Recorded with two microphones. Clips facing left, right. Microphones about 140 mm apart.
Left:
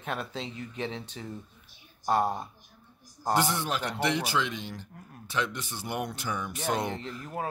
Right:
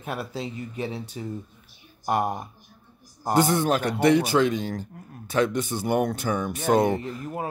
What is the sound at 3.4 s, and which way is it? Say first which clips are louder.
Speech: right 9 dB; 50° right (ahead or behind).